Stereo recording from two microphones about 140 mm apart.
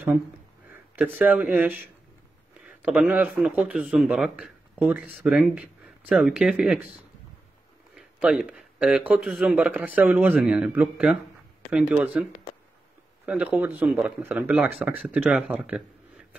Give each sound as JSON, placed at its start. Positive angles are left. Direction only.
{"t": 0.7, "sound": "speech", "side_deg": -15}
{"t": 2.8, "sound": "a man's voice", "side_deg": -10}
{"t": 7.9, "sound": "a man's voice", "side_deg": -5}